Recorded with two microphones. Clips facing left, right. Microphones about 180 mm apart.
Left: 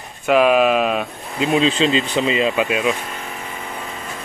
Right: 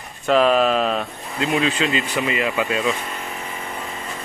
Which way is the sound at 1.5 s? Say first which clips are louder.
Left 4 dB; 20° left (ahead or behind).